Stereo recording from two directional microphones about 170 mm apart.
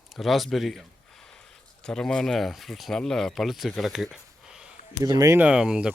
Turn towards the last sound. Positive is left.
turn(degrees=-5)  # may be behind; listen again after turning